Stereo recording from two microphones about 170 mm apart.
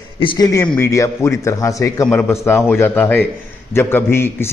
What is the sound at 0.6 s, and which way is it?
Speech, 5° left (ahead or behind).